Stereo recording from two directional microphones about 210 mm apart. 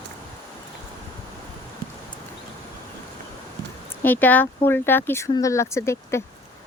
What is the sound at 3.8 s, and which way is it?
Speech, 10° left (ahead or behind).